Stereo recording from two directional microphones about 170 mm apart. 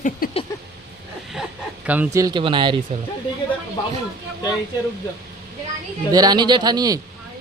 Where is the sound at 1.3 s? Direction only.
5° right (ahead or behind); by 2.8 s 30° right (ahead or behind).